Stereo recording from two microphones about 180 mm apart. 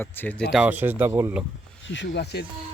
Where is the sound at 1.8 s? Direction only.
85° left; by 2.4 s 65° left (ahead or behind).